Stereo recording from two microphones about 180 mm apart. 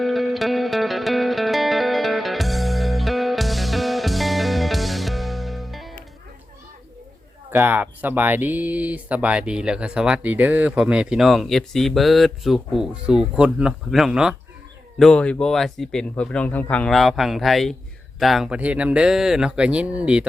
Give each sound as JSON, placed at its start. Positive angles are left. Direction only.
{"t": 0.0, "sound": "music", "side_deg": 0}
{"t": 7.5, "sound": "speech", "side_deg": -10}